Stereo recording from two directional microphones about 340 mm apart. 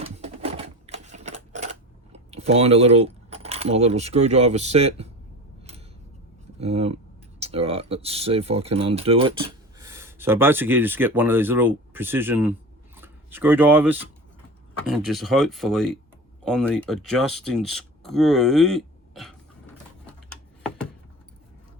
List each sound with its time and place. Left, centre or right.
0.0 s typewriter: centre
2.1 s speech: centre
6.6 s speech: centre
16.4 s a sound: centre